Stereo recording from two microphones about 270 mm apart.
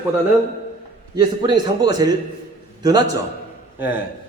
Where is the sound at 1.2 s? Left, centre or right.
Centre.